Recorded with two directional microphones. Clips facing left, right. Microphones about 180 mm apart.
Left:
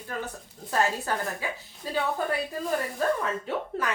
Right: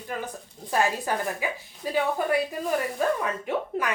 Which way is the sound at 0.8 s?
10° right (ahead or behind).